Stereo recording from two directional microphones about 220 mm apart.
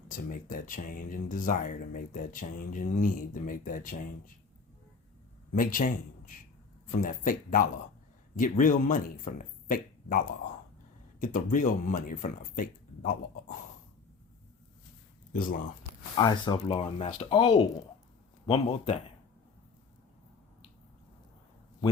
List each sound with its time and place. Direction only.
0.1 s speech: 35° left (ahead or behind)
5.5 s a man's voice: 35° left (ahead or behind)
15.3 s speech: 40° left (ahead or behind)
16.1 s speech: 20° left (ahead or behind)